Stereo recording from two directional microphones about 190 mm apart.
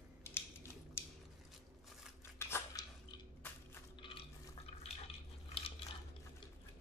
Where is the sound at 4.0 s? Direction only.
30° left (ahead or behind).